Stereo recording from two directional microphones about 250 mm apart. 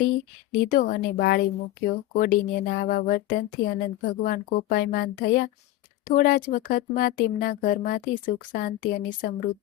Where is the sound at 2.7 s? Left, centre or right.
Left.